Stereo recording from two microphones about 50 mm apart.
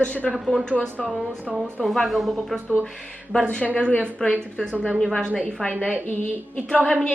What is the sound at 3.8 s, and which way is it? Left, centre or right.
Speech, left.